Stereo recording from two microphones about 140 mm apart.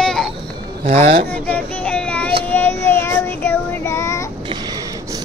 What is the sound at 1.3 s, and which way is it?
Child singing, 10° left (ahead or behind).